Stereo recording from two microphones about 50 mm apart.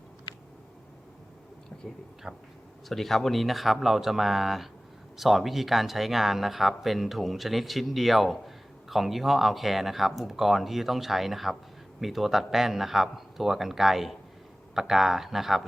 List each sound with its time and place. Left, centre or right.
2.3 s speech: centre
2.9 s speech: centre